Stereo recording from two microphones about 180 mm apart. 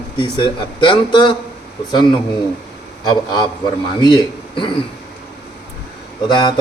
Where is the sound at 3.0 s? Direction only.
25° left (ahead or behind).